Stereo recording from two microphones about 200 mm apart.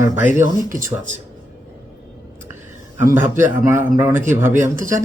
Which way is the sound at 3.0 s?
10° right (ahead or behind).